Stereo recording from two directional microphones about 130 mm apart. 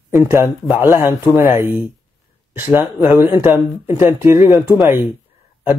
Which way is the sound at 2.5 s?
15° right (ahead or behind).